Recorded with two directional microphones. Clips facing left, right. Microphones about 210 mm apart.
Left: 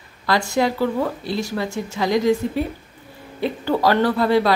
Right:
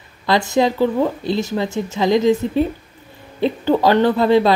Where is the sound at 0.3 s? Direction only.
20° right (ahead or behind).